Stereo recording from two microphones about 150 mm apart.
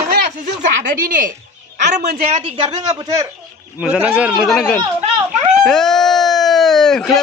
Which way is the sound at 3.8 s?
10° right (ahead or behind).